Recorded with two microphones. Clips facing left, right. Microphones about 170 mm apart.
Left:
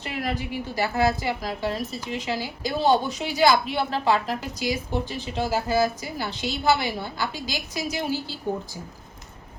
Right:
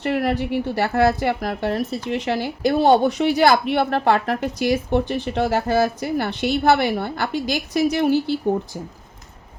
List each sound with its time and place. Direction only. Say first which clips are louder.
0.0 s a woman's voice: right 8 dB; 60° right (ahead or behind)